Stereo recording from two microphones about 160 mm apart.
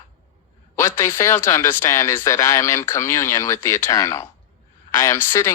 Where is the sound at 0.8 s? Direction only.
15° left (ahead or behind).